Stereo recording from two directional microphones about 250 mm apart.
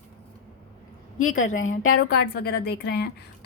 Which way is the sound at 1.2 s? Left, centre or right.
Left.